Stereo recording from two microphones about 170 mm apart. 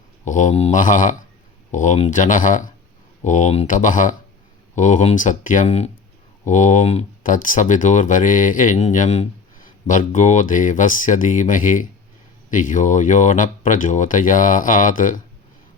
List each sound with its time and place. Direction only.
0.3 s speech: 45° left (ahead or behind)